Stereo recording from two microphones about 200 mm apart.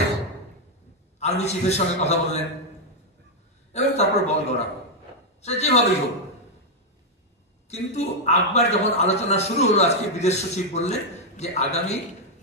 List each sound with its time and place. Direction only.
1.2 s a man's voice: 35° left (ahead or behind)
3.7 s a man's voice: 35° left (ahead or behind)
7.7 s a man's voice: 35° left (ahead or behind)